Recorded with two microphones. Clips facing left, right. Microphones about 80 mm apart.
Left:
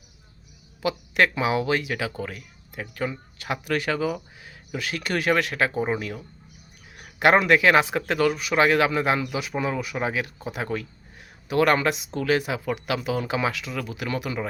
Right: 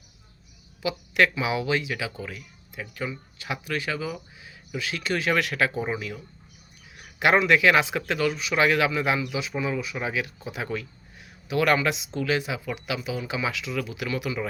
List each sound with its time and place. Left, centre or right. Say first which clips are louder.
0.8 s speech: left 1 dB; left
5.3 s speech: left 2 dB; left
5.9 s speech: left 3 dB; left
8.6 s speech: left 2 dB; left
9.3 s speech: left 1 dB; left